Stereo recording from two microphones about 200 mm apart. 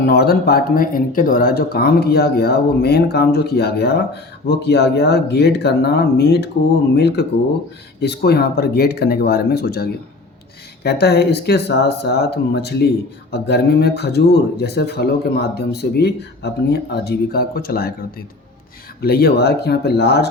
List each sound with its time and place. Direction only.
0.0 s speech: 50° left (ahead or behind)
19.0 s speech: 50° left (ahead or behind)